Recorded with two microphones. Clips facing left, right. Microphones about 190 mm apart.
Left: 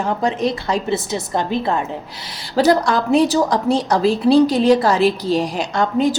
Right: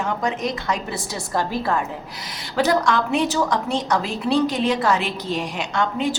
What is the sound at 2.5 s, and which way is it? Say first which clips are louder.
A woman's voice: left 4 dB; 35° left (ahead or behind).